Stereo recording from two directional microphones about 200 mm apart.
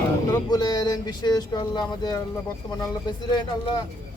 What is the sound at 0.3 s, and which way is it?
Speech, 20° left (ahead or behind).